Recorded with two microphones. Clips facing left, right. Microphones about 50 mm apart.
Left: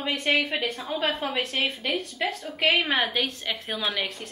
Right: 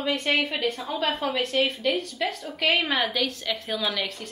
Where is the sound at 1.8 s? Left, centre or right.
Left.